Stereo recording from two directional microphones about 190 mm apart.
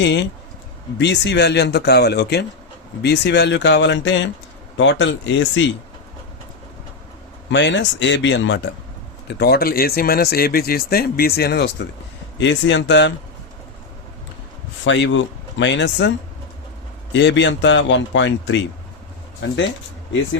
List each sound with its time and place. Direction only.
0.0 s a man's voice: 65° left (ahead or behind)
7.5 s a man's voice: 70° left (ahead or behind)
9.2 s speech: 60° left (ahead or behind)
12.4 s a man's voice: 75° left (ahead or behind)
14.8 s a man's voice: 75° left (ahead or behind)